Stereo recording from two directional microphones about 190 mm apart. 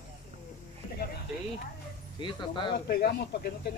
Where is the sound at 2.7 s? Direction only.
55° left (ahead or behind).